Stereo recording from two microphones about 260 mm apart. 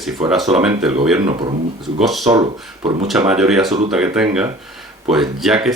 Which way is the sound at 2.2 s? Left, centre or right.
Centre.